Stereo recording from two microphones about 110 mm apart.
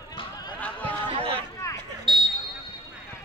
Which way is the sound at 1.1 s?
60° right (ahead or behind).